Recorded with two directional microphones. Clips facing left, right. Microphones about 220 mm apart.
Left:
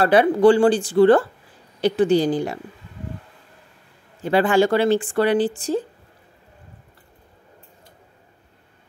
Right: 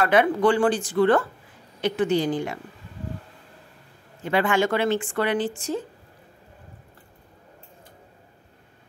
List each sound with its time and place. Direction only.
0.0 s speech: 35° left (ahead or behind)
4.2 s speech: 35° left (ahead or behind)